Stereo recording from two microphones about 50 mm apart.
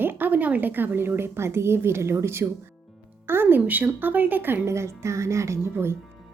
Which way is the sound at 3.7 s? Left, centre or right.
Right.